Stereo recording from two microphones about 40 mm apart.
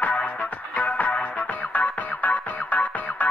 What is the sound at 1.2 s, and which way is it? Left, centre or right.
Music, left.